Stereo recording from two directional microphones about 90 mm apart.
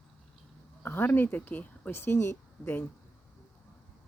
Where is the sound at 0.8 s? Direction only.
20° left (ahead or behind).